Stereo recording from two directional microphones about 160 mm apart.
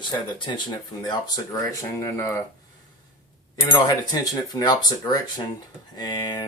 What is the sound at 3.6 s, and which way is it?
Speech, 25° left (ahead or behind).